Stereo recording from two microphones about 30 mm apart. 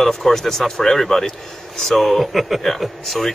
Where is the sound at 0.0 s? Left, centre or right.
Centre.